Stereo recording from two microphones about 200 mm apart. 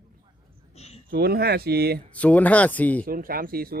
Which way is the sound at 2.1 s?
5° left (ahead or behind).